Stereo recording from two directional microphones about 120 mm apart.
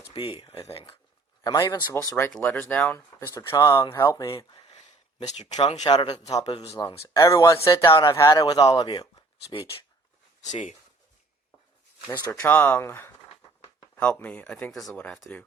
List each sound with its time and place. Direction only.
0.1 s speech: 45° left (ahead or behind)
1.5 s speech: 30° left (ahead or behind)
5.3 s speech: 70° left (ahead or behind)
5.8 s speech: 40° left (ahead or behind)
10.4 s speech: 80° left
12.3 s speech: 15° left (ahead or behind)